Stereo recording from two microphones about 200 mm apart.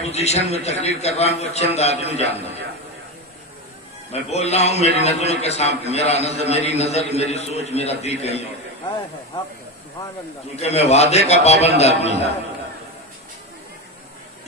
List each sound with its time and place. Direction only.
0.0 s a man's voice: 30° left (ahead or behind)
4.1 s a man's voice: 30° left (ahead or behind)
10.5 s a man's voice: 30° left (ahead or behind)